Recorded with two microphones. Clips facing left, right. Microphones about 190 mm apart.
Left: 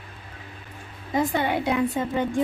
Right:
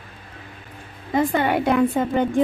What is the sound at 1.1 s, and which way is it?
A woman's voice, 55° right (ahead or behind).